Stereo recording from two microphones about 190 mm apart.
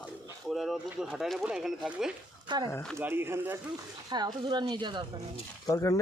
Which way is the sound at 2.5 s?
25° right (ahead or behind).